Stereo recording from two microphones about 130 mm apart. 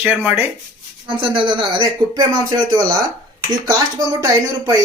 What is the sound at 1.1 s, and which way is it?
Speech, 40° right (ahead or behind).